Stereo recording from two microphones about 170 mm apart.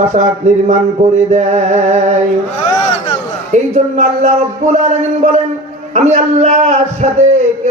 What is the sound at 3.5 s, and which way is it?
A man's voice, 45° right (ahead or behind).